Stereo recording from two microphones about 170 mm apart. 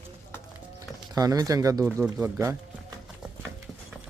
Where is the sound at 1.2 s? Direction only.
20° right (ahead or behind).